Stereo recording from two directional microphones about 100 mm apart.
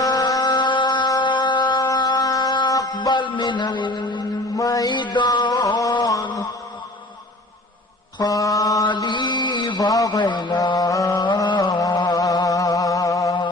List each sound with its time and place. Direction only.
0.0 s a sound: 40° left (ahead or behind)
4.5 s mantra: 40° left (ahead or behind)
8.2 s mantra: 35° left (ahead or behind)
8.9 s a sound: 50° left (ahead or behind)
10.2 s mantra: 50° left (ahead or behind)
11.8 s music: 45° left (ahead or behind)